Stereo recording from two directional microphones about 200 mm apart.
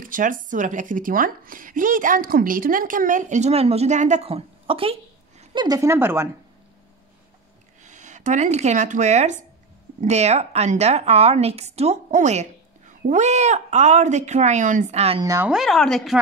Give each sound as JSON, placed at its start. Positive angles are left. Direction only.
{"t": 0.0, "sound": "a woman's voice", "side_deg": -40}
{"t": 7.8, "sound": "a woman's voice", "side_deg": -35}
{"t": 15.2, "sound": "speech", "side_deg": -15}
{"t": 15.5, "sound": "speech", "side_deg": 0}